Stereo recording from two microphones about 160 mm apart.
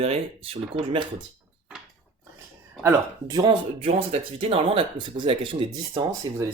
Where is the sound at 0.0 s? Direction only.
35° right (ahead or behind).